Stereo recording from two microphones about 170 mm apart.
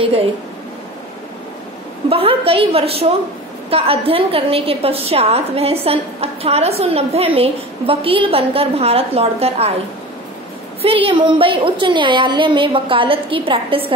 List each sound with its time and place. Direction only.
2.0 s a woman's voice: 35° right (ahead or behind)
10.8 s a woman's voice: 35° right (ahead or behind)